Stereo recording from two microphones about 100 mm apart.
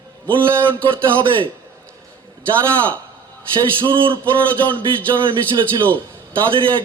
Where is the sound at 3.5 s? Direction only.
55° right (ahead or behind).